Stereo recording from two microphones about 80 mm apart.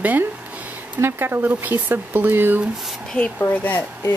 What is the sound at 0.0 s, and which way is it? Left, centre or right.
Speech, right.